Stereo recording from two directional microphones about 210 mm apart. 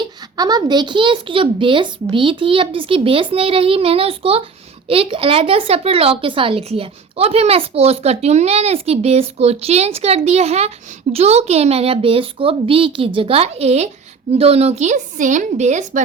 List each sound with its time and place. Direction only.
0.0 s a woman's voice: 20° right (ahead or behind); by 16.0 s 35° right (ahead or behind)